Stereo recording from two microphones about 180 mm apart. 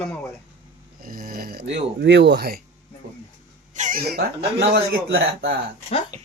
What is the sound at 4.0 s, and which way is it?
Speech, 60° right (ahead or behind).